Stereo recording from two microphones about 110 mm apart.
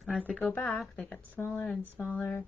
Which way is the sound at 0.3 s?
10° left (ahead or behind).